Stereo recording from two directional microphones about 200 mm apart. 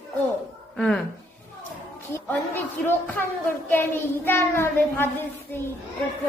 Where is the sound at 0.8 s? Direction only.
5° left (ahead or behind).